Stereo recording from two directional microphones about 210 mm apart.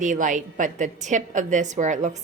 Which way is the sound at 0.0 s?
35° right (ahead or behind).